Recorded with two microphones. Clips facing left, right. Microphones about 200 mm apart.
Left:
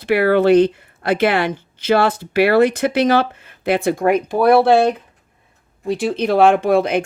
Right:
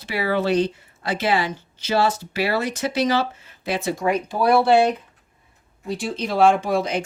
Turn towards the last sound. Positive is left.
turn(degrees=60)  # may be behind; listen again after turning